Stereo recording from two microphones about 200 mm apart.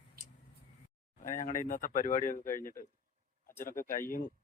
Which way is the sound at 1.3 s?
40° left (ahead or behind).